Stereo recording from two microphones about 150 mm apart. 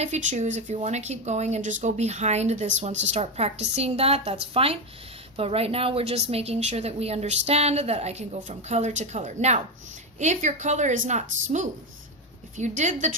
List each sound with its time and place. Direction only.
0.0 s speech: 50° right (ahead or behind)